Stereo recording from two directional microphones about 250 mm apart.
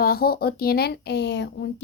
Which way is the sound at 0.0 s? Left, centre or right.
Left.